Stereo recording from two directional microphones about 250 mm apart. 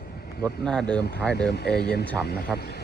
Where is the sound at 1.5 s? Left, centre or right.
Left.